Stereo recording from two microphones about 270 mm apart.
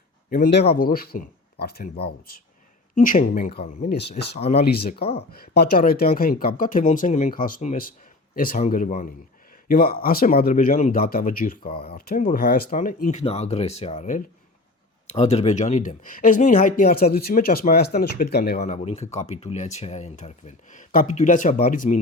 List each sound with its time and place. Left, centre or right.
0.3 s speech: left